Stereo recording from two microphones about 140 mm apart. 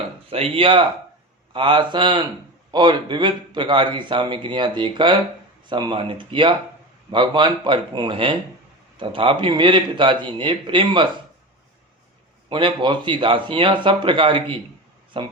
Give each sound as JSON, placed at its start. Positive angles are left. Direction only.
{"t": 0.3, "sound": "a man's voice", "side_deg": -45}
{"t": 12.5, "sound": "a man's voice", "side_deg": -35}